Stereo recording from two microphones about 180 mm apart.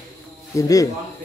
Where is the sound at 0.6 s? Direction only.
20° left (ahead or behind).